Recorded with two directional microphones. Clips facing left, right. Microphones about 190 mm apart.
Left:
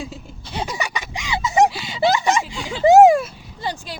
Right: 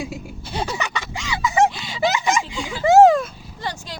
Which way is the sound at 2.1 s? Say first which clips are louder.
Left 2 dB; 35° left (ahead or behind).